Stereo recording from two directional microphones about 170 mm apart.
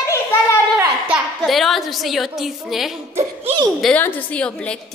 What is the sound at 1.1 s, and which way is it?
A woman's voice, centre (ahead or behind).